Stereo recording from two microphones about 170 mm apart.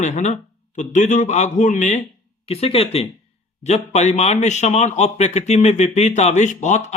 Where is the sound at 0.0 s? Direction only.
45° left (ahead or behind).